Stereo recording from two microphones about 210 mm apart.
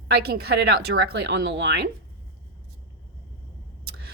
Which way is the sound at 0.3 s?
50° right (ahead or behind).